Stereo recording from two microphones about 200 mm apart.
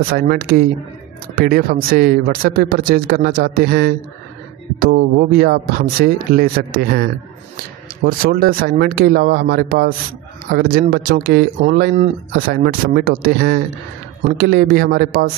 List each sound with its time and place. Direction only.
0.0 s speech: 50° right (ahead or behind)